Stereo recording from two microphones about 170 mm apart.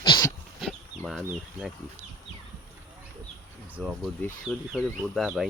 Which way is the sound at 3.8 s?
5° left (ahead or behind).